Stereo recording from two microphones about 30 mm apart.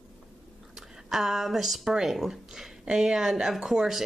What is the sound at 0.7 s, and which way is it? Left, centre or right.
Speech, centre.